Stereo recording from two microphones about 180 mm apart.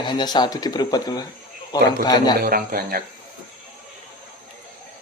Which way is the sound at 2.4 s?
55° right (ahead or behind).